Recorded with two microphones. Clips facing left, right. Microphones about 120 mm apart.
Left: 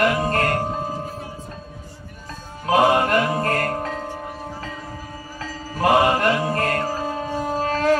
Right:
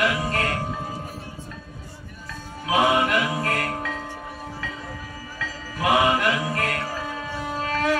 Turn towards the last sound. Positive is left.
turn(degrees=40)  # may be behind; listen again after turning